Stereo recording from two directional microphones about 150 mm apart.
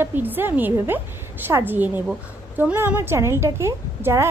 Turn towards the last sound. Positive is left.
turn(degrees=-15)  # may be behind; listen again after turning